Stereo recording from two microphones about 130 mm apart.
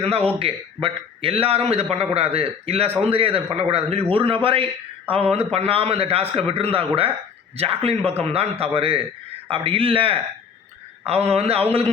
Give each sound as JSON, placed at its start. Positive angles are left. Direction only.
{"t": 0.0, "sound": "a man's voice", "side_deg": -50}